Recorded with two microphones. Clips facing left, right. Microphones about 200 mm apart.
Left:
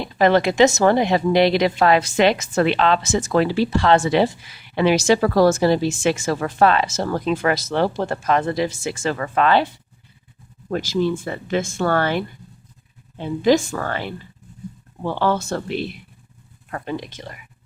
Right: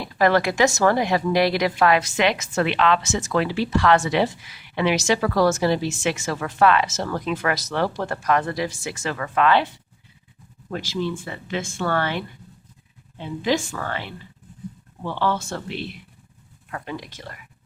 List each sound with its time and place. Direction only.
0.0 s a woman's voice: 25° left (ahead or behind)
10.7 s speech: 45° left (ahead or behind)
16.7 s a woman's voice: 30° left (ahead or behind)
17.1 s speech: 20° left (ahead or behind)